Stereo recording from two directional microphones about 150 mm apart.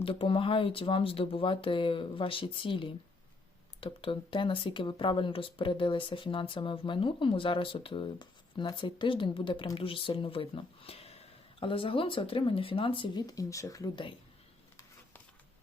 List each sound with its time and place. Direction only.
0.0 s speech: 35° left (ahead or behind)